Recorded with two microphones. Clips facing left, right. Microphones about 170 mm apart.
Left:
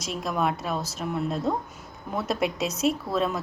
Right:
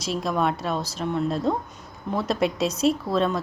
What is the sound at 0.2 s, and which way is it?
A woman's voice, centre (ahead or behind).